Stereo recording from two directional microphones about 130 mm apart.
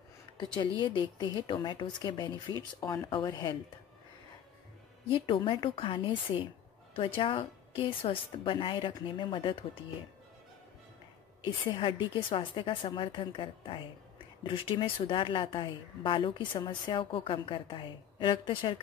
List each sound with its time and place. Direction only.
0.6 s a woman's voice: 40° left (ahead or behind)
5.1 s a woman's voice: 40° left (ahead or behind)
11.4 s a woman's voice: 40° left (ahead or behind)